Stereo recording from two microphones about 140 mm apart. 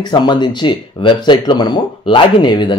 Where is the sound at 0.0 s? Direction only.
30° left (ahead or behind).